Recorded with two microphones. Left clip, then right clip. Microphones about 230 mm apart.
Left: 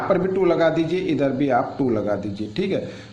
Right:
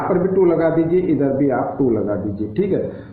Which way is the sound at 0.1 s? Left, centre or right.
Left.